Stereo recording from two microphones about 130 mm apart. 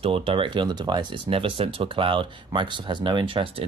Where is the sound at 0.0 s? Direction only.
50° right (ahead or behind).